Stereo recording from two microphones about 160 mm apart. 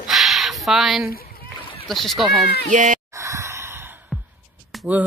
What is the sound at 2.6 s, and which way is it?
Speech, 50° right (ahead or behind).